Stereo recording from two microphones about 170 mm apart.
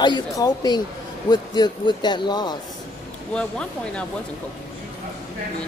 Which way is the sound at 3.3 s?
5° left (ahead or behind).